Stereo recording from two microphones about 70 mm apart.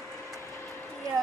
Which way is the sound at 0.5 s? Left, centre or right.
Left.